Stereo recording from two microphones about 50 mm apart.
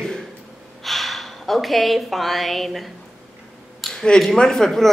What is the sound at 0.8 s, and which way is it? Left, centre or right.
Speech, centre.